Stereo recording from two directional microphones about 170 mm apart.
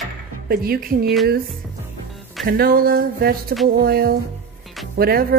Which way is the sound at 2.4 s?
60° right (ahead or behind).